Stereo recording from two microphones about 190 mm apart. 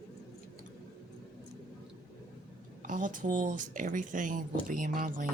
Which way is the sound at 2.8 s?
45° right (ahead or behind).